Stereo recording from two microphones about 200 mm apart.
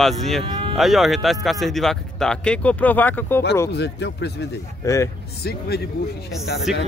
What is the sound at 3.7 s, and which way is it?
Speech, 60° left (ahead or behind).